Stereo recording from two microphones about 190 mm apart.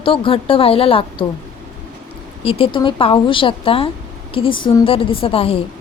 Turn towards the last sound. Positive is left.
turn(degrees=30)  # may be behind; listen again after turning